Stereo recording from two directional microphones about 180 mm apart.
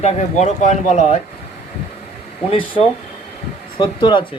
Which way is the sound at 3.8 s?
25° left (ahead or behind).